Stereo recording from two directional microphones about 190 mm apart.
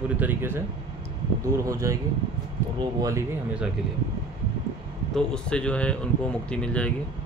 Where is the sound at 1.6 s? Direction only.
15° right (ahead or behind).